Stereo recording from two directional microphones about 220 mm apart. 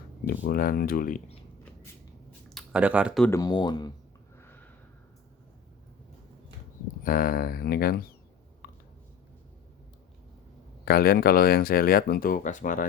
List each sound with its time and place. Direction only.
0.3 s speech: 45° left (ahead or behind)
2.6 s speech: 5° right (ahead or behind)
3.2 s speech: 15° left (ahead or behind)
4.4 s snort: 10° left (ahead or behind)
7.0 s speech: 40° left (ahead or behind)
10.8 s speech: 45° left (ahead or behind)